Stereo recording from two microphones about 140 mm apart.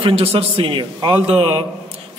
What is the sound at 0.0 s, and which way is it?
A man's voice, 45° right (ahead or behind).